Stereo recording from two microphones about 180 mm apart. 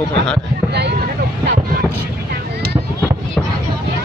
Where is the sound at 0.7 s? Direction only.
70° right (ahead or behind).